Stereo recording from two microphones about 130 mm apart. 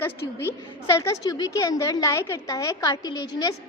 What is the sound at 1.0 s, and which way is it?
A woman's voice, 25° left (ahead or behind).